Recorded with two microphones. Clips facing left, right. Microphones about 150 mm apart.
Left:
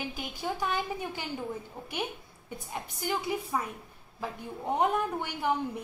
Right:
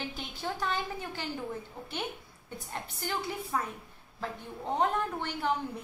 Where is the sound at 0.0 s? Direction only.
10° left (ahead or behind).